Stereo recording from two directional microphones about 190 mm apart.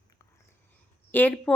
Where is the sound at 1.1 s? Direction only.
10° left (ahead or behind).